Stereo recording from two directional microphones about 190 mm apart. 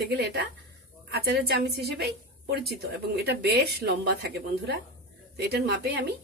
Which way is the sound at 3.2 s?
60° right (ahead or behind).